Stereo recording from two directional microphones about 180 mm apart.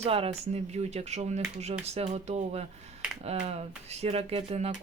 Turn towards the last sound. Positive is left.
turn(degrees=-35)  # may be behind; listen again after turning